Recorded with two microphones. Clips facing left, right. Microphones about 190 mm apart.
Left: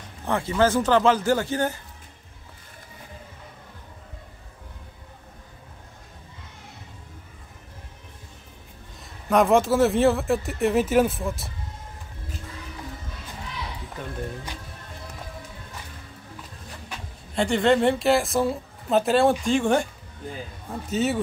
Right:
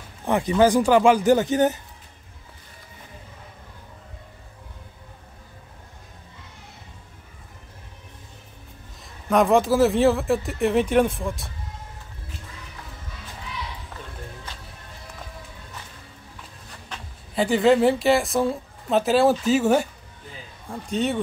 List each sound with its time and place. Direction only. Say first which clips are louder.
0.2 s speech: right 3 dB; 15° right (ahead or behind)
9.3 s speech: right 1 dB; centre (ahead or behind)
17.4 s speech: right 2 dB; 5° right (ahead or behind)
20.8 s speech: even; 5° left (ahead or behind)